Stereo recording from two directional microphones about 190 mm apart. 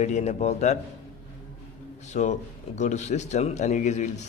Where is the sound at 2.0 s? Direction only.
35° left (ahead or behind).